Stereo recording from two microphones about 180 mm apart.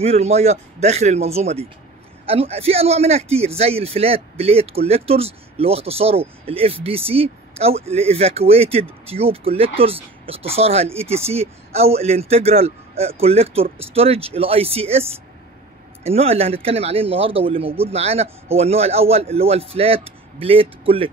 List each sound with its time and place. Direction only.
0.0 s a man's voice: 35° right (ahead or behind)